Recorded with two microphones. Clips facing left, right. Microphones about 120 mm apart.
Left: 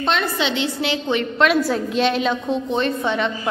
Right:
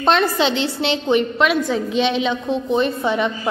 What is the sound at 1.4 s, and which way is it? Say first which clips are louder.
A woman's voice: even; centre (ahead or behind).